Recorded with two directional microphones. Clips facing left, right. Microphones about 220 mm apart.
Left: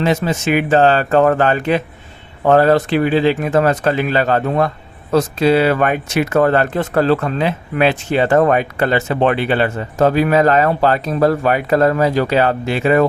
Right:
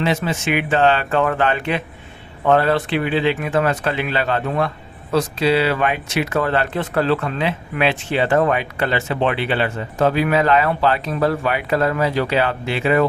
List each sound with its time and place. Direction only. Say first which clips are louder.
0.0 s speech: left 4 dB; 40° left (ahead or behind)